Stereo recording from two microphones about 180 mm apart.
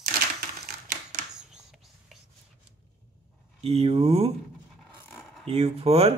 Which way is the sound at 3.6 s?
35° right (ahead or behind).